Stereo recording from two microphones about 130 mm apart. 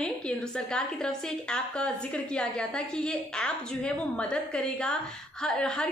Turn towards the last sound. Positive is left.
turn(degrees=5)  # may be behind; listen again after turning